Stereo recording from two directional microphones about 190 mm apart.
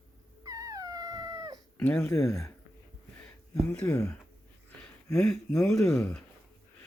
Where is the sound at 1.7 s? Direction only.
10° left (ahead or behind).